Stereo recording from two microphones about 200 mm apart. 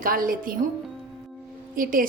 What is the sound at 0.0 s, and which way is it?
Speech, 45° right (ahead or behind).